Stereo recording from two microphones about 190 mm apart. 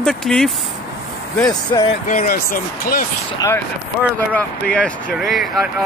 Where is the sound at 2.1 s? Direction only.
50° left (ahead or behind).